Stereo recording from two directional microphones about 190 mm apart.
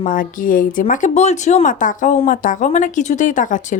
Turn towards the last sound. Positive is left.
turn(degrees=45)  # may be behind; listen again after turning